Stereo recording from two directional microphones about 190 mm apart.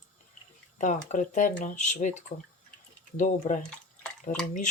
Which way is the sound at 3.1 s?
40° left (ahead or behind).